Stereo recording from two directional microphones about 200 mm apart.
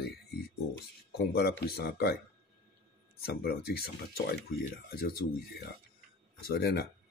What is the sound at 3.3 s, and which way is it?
Speech, 50° left (ahead or behind).